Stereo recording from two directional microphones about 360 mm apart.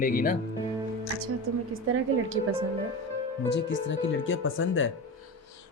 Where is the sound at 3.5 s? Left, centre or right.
Left.